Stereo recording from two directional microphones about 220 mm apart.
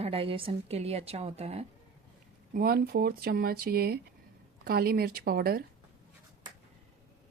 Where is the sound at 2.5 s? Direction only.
40° right (ahead or behind).